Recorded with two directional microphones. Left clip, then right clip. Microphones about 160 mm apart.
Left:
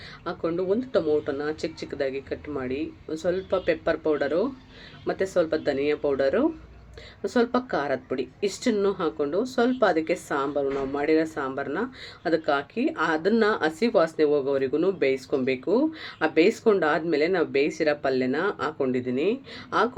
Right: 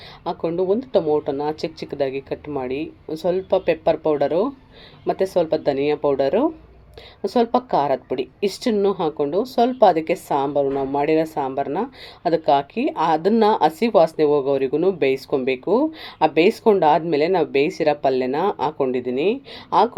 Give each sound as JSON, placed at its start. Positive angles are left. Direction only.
{"t": 0.3, "sound": "a woman's voice", "side_deg": -20}